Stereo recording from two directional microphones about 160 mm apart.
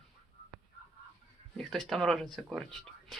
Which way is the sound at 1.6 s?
Centre (ahead or behind).